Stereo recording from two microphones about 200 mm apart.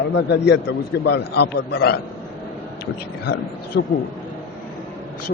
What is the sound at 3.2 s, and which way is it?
Speech, 55° left (ahead or behind).